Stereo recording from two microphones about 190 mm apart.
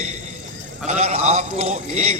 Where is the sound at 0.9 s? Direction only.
35° right (ahead or behind).